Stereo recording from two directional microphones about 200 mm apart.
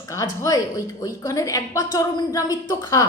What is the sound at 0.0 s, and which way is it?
A woman's voice, 15° left (ahead or behind).